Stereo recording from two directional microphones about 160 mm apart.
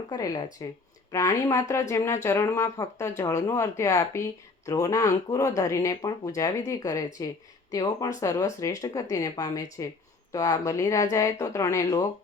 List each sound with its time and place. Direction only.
0.1 s speech: 25° left (ahead or behind)